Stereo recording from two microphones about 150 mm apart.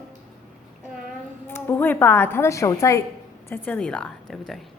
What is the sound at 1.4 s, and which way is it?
A woman's voice, 15° left (ahead or behind).